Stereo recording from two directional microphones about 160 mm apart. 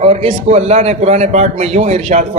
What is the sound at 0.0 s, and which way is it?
A man's voice, 40° right (ahead or behind).